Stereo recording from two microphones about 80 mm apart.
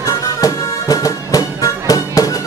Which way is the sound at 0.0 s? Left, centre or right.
Left.